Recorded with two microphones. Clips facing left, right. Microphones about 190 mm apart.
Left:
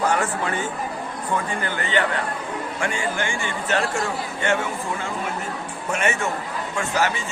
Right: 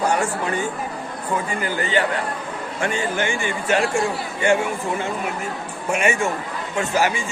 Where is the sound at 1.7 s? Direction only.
40° right (ahead or behind).